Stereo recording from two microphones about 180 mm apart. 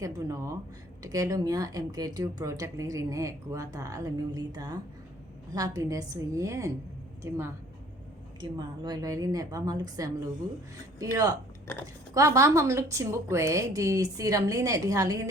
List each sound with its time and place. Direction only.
0.0 s a woman's voice: 20° right (ahead or behind)
11.7 s speech: 15° left (ahead or behind)
12.1 s a woman's voice: 15° right (ahead or behind)